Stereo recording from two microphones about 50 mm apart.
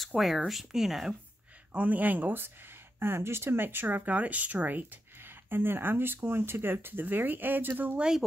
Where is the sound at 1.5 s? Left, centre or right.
Right.